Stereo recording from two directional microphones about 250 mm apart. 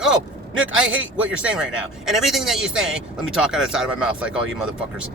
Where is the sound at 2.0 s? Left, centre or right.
Centre.